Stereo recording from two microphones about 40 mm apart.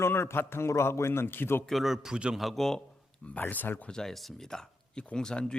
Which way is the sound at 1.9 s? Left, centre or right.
Centre.